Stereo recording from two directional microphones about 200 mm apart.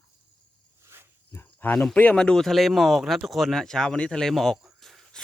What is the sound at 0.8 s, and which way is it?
Dog, 10° right (ahead or behind).